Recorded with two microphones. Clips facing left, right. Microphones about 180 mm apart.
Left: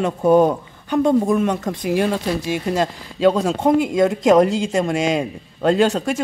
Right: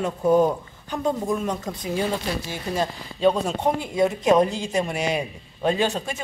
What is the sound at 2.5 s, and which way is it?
Speech, 90° left.